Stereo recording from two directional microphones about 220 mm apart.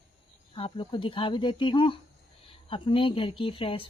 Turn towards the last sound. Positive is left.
turn(degrees=25)  # may be behind; listen again after turning